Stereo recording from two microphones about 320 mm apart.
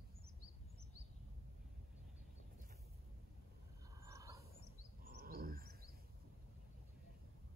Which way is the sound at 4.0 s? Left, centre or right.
Centre.